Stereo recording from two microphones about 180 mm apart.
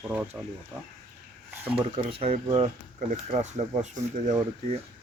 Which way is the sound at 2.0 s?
35° right (ahead or behind).